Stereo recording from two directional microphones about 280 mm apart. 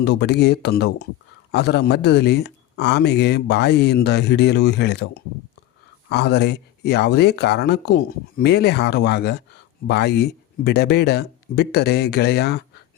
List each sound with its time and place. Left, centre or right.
0.0 s speech: left